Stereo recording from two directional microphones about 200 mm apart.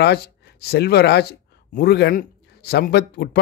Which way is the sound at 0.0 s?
55° left (ahead or behind).